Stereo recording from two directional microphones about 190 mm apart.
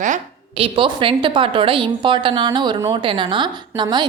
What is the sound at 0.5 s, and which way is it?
A woman's voice, 30° right (ahead or behind).